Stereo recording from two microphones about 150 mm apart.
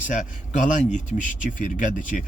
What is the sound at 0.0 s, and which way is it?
A man's voice, 55° left (ahead or behind).